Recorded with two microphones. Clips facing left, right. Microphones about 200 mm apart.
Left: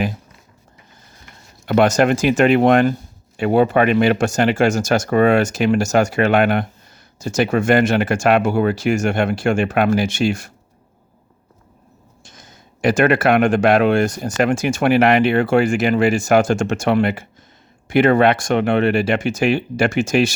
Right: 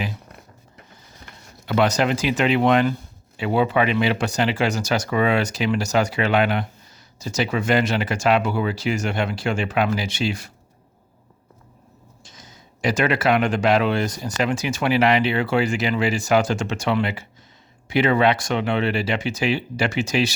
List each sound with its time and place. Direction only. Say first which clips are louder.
1.6 s speech: left 5 dB; 50° left (ahead or behind)
12.2 s speech: left 2 dB; 50° left (ahead or behind)